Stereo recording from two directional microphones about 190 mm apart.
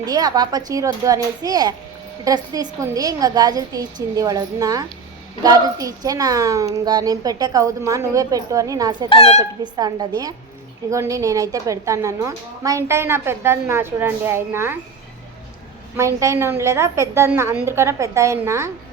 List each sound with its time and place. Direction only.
0.0 s a woman's voice: 20° right (ahead or behind)
9.0 s speech: 30° left (ahead or behind)
9.4 s a woman's voice: 20° right (ahead or behind)
16.0 s a woman's voice: 15° right (ahead or behind)